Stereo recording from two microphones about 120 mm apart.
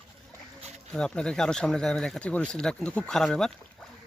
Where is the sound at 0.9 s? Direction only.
5° left (ahead or behind).